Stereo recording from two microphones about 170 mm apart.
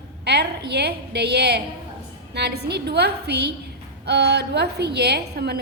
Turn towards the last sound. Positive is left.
turn(degrees=-70)  # may be behind; listen again after turning